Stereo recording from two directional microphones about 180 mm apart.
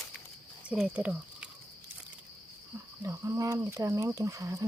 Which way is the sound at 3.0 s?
15° right (ahead or behind).